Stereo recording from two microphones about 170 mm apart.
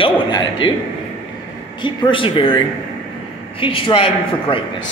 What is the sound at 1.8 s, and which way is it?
Speech, 30° left (ahead or behind).